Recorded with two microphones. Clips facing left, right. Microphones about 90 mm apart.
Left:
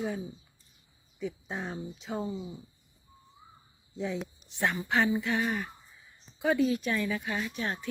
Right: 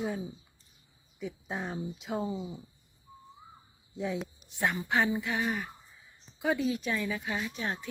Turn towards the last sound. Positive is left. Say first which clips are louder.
# left 1 dB
turn(degrees=-15)  # may be behind; listen again after turning